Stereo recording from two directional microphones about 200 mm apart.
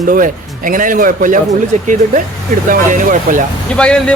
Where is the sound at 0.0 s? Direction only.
40° right (ahead or behind).